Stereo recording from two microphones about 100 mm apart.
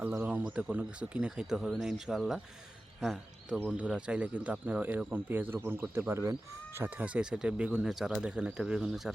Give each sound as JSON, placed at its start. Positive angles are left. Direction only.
{"t": 0.0, "sound": "speech", "side_deg": -25}
{"t": 0.3, "sound": "speech", "side_deg": -15}
{"t": 6.7, "sound": "speech", "side_deg": -20}